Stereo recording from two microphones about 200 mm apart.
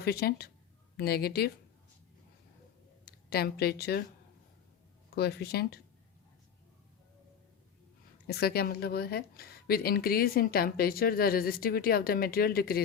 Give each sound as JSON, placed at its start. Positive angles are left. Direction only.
{"t": 0.0, "sound": "speech", "side_deg": 55}
{"t": 3.1, "sound": "a woman's voice", "side_deg": 50}
{"t": 5.1, "sound": "speech", "side_deg": 55}
{"t": 8.3, "sound": "speech", "side_deg": 50}